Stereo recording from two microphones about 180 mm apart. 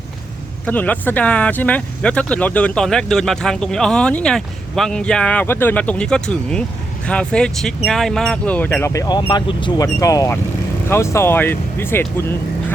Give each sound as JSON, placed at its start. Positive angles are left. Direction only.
{"t": 0.6, "sound": "speech", "side_deg": 10}